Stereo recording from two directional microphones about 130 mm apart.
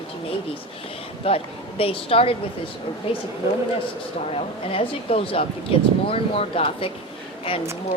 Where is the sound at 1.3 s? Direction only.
45° left (ahead or behind).